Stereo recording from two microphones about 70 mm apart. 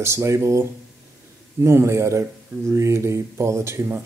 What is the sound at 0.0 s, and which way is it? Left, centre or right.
A man's voice, right.